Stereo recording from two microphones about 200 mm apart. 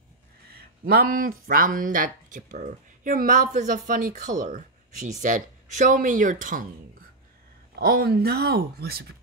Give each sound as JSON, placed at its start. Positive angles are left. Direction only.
{"t": 0.5, "sound": "speech", "side_deg": -45}
{"t": 7.8, "sound": "speech", "side_deg": -50}